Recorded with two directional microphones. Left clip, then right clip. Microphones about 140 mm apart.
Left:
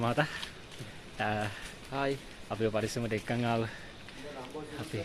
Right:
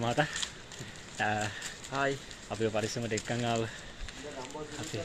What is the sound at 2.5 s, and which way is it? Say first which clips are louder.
Speech: even; 30° left (ahead or behind).